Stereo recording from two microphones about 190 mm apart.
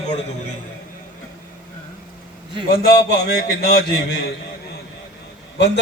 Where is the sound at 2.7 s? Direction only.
55° left (ahead or behind).